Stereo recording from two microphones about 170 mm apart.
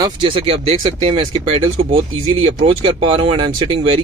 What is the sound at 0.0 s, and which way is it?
Speech, 30° right (ahead or behind).